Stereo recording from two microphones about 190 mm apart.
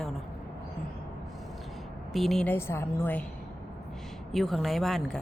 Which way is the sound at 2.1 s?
Centre (ahead or behind).